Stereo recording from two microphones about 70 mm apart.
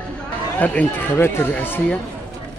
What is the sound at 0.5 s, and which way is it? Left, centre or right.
Speech, left.